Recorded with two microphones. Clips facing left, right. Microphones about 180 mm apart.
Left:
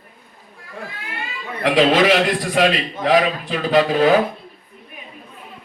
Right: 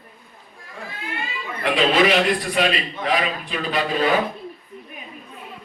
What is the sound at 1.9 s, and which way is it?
A man's voice, 90° left.